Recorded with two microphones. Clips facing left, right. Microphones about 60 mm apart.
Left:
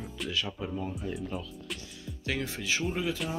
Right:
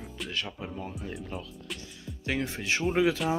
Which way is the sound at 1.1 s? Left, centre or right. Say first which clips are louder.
Left 2 dB; centre.